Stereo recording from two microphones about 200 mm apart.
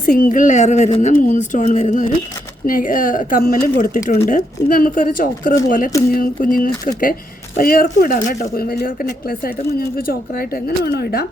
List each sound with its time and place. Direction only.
0.0 s a woman's voice: 50° left (ahead or behind)